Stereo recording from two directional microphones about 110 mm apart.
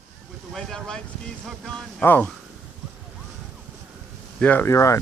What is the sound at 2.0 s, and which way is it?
Speech, 15° left (ahead or behind).